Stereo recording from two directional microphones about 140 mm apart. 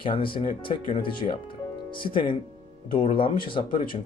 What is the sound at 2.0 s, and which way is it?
Speech, 35° left (ahead or behind).